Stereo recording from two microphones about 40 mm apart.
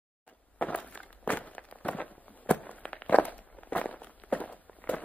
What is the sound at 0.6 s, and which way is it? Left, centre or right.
Walk, left.